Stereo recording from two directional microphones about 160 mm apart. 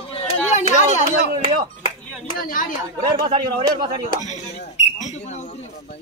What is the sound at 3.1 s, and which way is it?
Speech, 25° right (ahead or behind).